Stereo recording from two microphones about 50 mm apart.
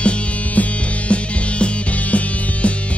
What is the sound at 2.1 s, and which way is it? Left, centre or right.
Music, left.